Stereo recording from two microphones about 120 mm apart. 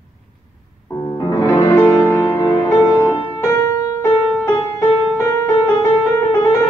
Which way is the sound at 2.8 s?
10° right (ahead or behind).